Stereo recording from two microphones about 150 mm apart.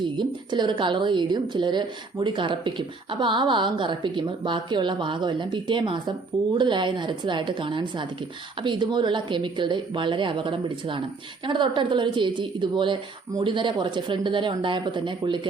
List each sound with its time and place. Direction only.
0.0 s a woman's voice: 30° right (ahead or behind)